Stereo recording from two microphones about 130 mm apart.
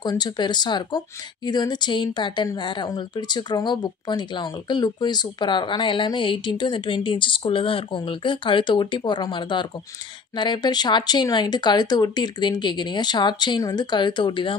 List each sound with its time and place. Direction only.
0.0 s speech: 30° left (ahead or behind)